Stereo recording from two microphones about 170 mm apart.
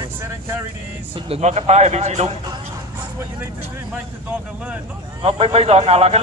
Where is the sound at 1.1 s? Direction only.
40° right (ahead or behind).